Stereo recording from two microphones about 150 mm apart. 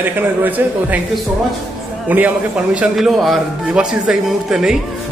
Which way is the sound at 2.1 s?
10° right (ahead or behind).